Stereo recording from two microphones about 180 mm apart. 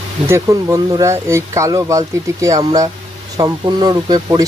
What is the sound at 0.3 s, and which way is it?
Speech, 15° right (ahead or behind).